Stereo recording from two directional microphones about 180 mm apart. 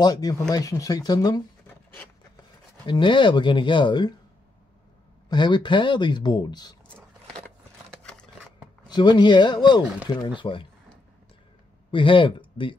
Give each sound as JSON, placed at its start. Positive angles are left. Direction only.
{"t": 0.0, "sound": "speech", "side_deg": 20}
{"t": 2.9, "sound": "speech", "side_deg": 25}
{"t": 5.3, "sound": "speech", "side_deg": 25}
{"t": 7.9, "sound": "rub", "side_deg": 5}
{"t": 8.8, "sound": "speech", "side_deg": 25}
{"t": 11.9, "sound": "speech", "side_deg": 25}